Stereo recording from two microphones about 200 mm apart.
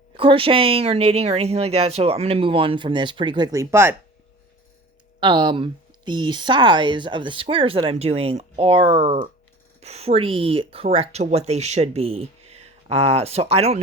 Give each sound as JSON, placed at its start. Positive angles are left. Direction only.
{"t": 0.2, "sound": "speech", "side_deg": -25}
{"t": 5.2, "sound": "speech", "side_deg": -25}